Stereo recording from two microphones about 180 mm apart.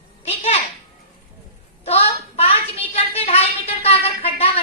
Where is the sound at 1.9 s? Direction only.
35° left (ahead or behind).